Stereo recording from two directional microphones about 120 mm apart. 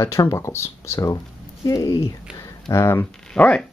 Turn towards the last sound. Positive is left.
turn(degrees=10)  # may be behind; listen again after turning